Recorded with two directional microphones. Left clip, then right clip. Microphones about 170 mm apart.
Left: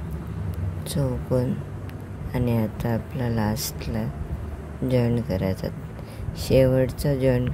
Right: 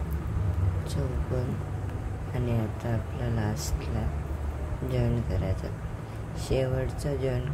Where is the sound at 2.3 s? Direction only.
50° left (ahead or behind).